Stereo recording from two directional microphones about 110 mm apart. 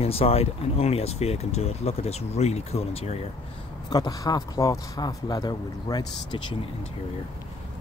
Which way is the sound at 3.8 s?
35° left (ahead or behind).